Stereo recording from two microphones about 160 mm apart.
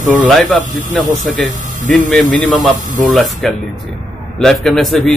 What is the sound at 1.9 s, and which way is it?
Speech, centre (ahead or behind).